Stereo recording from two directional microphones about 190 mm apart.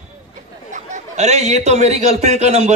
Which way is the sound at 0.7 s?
40° right (ahead or behind).